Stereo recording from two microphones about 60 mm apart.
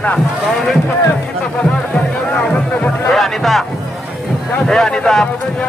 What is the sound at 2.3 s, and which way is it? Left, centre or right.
Speech, left.